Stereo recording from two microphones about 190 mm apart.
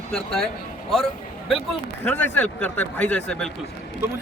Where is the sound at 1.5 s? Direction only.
Centre (ahead or behind).